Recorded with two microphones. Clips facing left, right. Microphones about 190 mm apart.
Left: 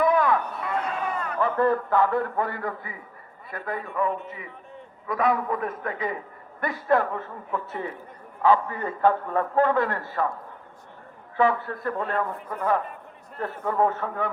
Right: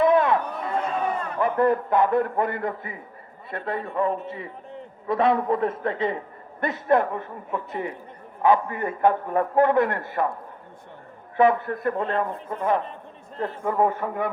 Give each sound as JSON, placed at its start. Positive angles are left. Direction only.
{"t": 0.0, "sound": "a sound", "side_deg": -25}
{"t": 1.4, "sound": "a man's voice", "side_deg": -15}
{"t": 11.3, "sound": "a man's voice", "side_deg": -20}
{"t": 13.4, "sound": "a man's voice", "side_deg": -10}